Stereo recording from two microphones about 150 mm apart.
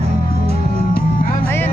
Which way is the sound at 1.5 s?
15° left (ahead or behind).